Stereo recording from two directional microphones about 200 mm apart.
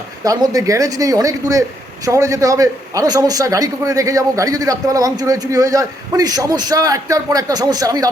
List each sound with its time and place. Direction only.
0.3 s a man's voice: 15° right (ahead or behind)